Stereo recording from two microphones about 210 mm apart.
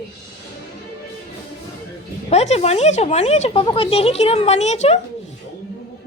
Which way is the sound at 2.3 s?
30° left (ahead or behind).